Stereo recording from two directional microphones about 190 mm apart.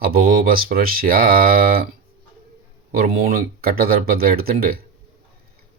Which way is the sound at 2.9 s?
50° right (ahead or behind).